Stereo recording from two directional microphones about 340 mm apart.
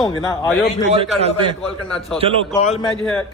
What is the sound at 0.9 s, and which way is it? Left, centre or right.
A man's voice, centre.